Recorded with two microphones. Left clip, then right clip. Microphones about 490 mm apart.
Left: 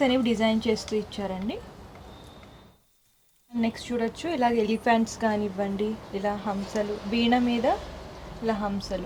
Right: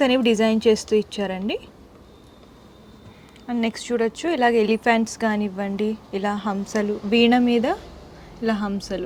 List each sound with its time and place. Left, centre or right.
0.0 s a woman's voice: right
3.6 s a woman's voice: right
8.9 s a woman's voice: right